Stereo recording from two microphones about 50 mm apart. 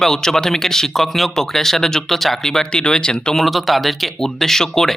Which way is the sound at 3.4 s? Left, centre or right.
Centre.